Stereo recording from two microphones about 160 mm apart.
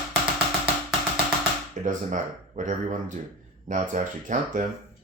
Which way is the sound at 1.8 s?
50° right (ahead or behind).